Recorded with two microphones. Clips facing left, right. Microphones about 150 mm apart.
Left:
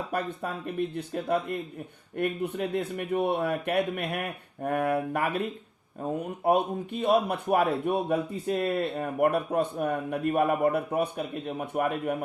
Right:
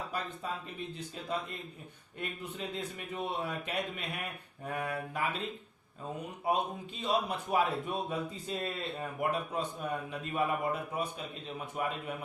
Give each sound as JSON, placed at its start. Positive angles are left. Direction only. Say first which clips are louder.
{"t": 0.1, "sound": "speech", "louder": "left 7 dB", "side_deg": 60}